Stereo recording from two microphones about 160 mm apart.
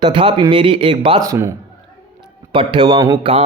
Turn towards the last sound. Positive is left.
turn(degrees=-25)  # may be behind; listen again after turning